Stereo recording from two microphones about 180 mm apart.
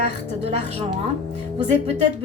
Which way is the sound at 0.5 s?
35° right (ahead or behind).